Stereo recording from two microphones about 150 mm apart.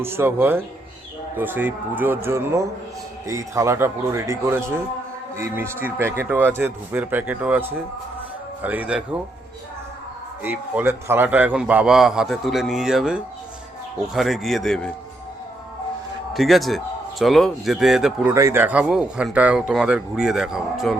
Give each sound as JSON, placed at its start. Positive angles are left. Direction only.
{"t": 0.0, "sound": "a man's voice", "side_deg": -15}
{"t": 10.4, "sound": "a man's voice", "side_deg": -15}
{"t": 16.3, "sound": "a man's voice", "side_deg": 0}
{"t": 18.3, "sound": "a man's voice", "side_deg": -15}